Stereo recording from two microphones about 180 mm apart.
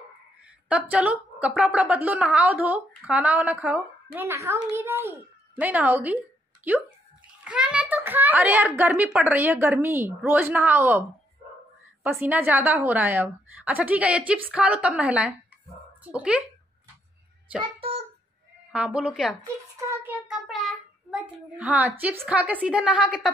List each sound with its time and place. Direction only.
0.7 s a woman's voice: 5° right (ahead or behind)
7.4 s a child's voice: 5° right (ahead or behind)
17.7 s a sound: 30° right (ahead or behind)
18.7 s a woman's voice: 5° right (ahead or behind)